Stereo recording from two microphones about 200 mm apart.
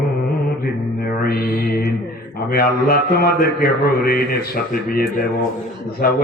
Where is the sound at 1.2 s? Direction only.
50° left (ahead or behind).